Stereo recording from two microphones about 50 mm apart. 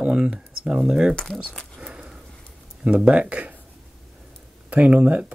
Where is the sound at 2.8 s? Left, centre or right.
Centre.